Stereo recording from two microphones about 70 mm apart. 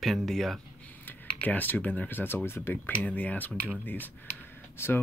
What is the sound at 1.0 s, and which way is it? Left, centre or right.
Speech, left.